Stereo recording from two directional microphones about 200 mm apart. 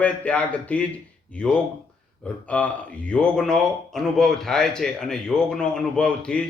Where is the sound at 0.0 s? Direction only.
5° left (ahead or behind).